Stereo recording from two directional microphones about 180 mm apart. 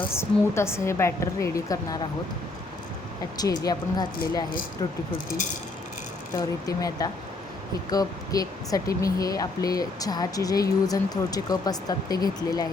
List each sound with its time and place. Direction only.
0.1 s a woman's voice: 15° left (ahead or behind)
3.3 s speech: 20° left (ahead or behind)
6.3 s speech: 20° left (ahead or behind)